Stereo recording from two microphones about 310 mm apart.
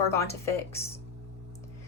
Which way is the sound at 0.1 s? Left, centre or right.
Centre.